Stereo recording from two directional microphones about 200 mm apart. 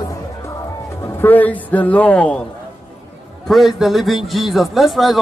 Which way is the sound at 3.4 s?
Centre (ahead or behind).